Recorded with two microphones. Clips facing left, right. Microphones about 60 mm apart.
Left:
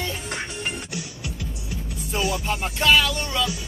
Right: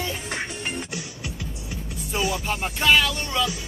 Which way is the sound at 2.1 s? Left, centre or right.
Centre.